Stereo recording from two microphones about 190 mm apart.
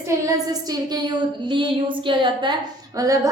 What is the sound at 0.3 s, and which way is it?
A woman's voice, 20° right (ahead or behind).